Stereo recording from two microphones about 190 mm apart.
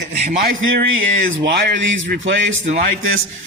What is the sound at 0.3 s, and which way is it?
Speech, 50° right (ahead or behind).